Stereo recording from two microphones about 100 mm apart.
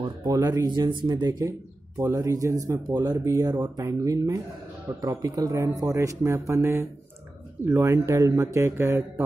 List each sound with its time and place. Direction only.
0.3 s speech: 35° right (ahead or behind)
2.0 s a man's voice: 30° right (ahead or behind)
3.3 s a man's voice: 30° right (ahead or behind)